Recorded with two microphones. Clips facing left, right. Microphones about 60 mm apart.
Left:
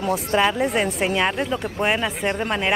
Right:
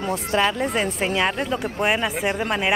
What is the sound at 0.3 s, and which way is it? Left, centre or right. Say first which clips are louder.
A woman's voice: left 1 dB; centre.